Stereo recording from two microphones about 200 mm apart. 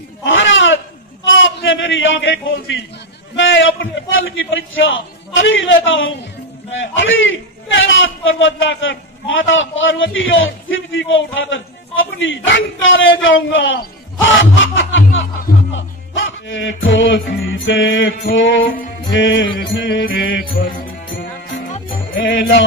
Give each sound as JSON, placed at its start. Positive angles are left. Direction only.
{"t": 0.2, "sound": "a sound", "side_deg": 70}
{"t": 1.3, "sound": "a man's voice", "side_deg": 70}
{"t": 15.7, "sound": "music", "side_deg": 70}
{"t": 18.3, "sound": "a man's voice", "side_deg": 70}
{"t": 21.2, "sound": "music", "side_deg": 40}
{"t": 22.1, "sound": "a man's voice", "side_deg": 70}